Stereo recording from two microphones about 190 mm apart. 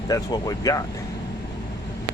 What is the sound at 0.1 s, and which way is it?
Speech, 20° left (ahead or behind).